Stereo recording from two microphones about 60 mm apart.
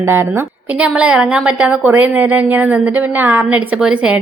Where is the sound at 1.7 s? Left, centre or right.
Right.